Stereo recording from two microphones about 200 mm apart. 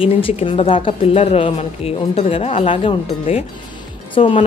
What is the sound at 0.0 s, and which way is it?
A woman's voice, 30° left (ahead or behind).